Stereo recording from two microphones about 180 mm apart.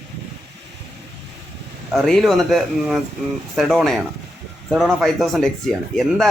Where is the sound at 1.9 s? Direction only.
Centre (ahead or behind).